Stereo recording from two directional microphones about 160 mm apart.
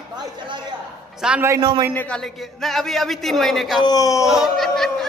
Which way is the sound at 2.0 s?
5° left (ahead or behind).